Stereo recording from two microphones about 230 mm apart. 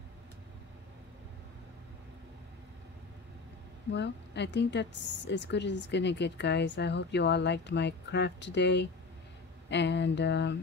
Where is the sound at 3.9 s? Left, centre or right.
Left.